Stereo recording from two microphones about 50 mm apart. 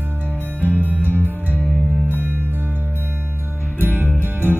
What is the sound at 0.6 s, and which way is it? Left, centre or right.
Music, right.